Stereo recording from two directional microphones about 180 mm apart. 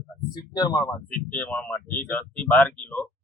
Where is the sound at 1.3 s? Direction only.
10° left (ahead or behind).